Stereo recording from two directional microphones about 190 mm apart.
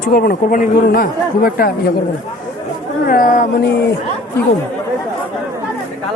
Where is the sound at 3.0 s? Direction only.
50° left (ahead or behind).